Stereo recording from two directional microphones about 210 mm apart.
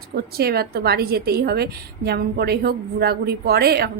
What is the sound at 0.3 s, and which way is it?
A woman's voice, 45° right (ahead or behind).